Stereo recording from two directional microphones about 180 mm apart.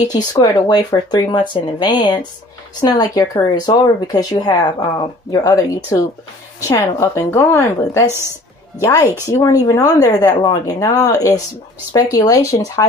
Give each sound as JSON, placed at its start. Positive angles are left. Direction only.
{"t": 0.1, "sound": "a woman's voice", "side_deg": 20}